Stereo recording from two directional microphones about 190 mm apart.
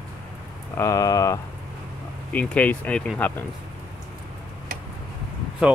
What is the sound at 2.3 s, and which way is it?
Speech, 5° left (ahead or behind).